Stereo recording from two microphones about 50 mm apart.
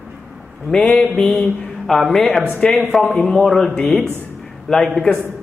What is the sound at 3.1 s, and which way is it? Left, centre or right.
Speech, centre.